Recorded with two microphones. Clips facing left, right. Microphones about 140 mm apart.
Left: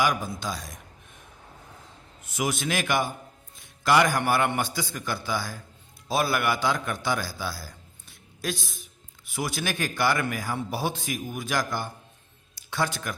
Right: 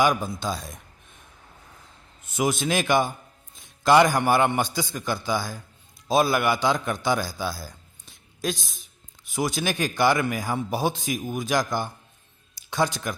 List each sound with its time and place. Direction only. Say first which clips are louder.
0.0 s a man's voice: right 4 dB; 25° right (ahead or behind)
2.3 s a man's voice: right 4 dB; 25° right (ahead or behind)